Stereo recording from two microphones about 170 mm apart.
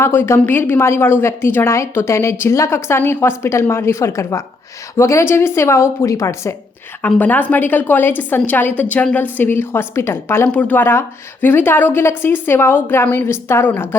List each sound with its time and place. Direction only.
0.0 s a woman's voice: 15° left (ahead or behind)